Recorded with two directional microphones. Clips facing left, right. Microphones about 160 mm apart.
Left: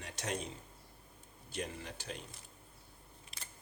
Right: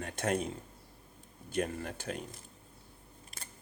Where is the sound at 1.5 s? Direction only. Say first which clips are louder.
Right 8 dB; 55° right (ahead or behind).